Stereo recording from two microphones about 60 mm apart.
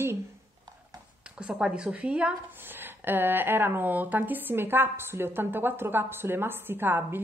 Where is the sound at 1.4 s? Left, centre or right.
Centre.